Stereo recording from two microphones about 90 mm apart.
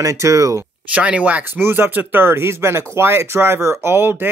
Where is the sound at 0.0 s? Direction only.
35° right (ahead or behind).